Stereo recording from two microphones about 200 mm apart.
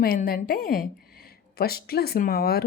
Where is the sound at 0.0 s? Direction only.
45° left (ahead or behind).